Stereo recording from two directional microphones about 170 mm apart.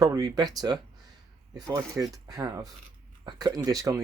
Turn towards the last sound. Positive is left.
turn(degrees=-20)  # may be behind; listen again after turning